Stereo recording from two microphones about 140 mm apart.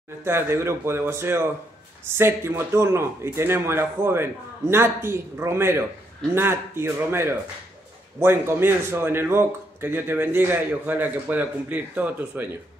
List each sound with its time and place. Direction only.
0.2 s speech: 20° right (ahead or behind)